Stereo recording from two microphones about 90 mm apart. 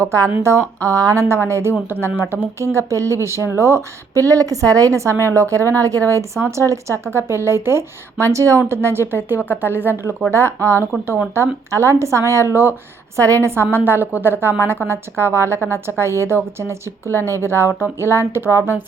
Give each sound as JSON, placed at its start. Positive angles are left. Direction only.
{"t": 0.0, "sound": "a woman's voice", "side_deg": -35}